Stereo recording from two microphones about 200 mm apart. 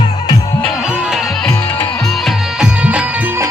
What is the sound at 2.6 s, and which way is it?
Music, 5° right (ahead or behind).